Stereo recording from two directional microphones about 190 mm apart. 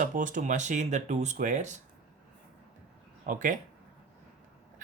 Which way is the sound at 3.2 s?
45° right (ahead or behind).